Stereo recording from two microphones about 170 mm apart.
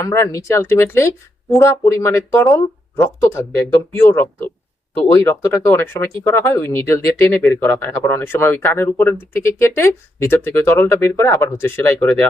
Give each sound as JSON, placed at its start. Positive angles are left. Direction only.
{"t": 0.0, "sound": "speech", "side_deg": 20}